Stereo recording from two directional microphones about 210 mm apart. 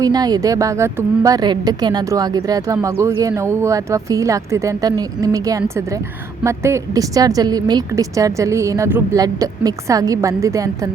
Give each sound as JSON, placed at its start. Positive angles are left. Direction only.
{"t": 0.0, "sound": "a woman's voice", "side_deg": -20}